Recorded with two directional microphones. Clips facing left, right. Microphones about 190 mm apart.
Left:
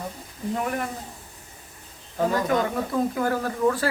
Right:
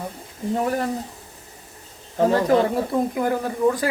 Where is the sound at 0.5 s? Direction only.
35° right (ahead or behind).